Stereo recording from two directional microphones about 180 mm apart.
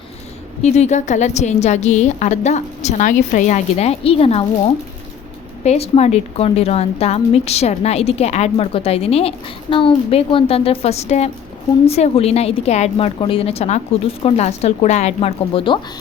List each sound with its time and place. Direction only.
0.6 s a woman's voice: 40° left (ahead or behind)
5.6 s a woman's voice: 35° left (ahead or behind)